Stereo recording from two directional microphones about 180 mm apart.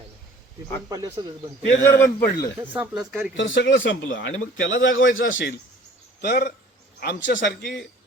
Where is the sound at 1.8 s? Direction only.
15° left (ahead or behind).